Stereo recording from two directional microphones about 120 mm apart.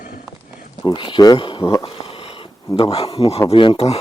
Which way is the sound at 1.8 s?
50° left (ahead or behind).